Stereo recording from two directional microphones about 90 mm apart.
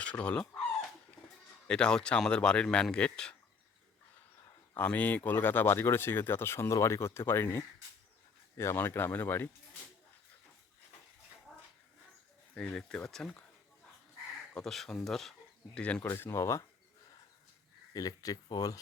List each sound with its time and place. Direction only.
0.0 s speech: 10° left (ahead or behind)
1.6 s speech: 10° left (ahead or behind)
4.8 s speech: 20° left (ahead or behind)
11.5 s a sound: 5° left (ahead or behind)
12.5 s speech: 10° left (ahead or behind)
14.5 s speech: 5° left (ahead or behind)
16.0 s speech: 25° left (ahead or behind)
17.9 s speech: 45° left (ahead or behind)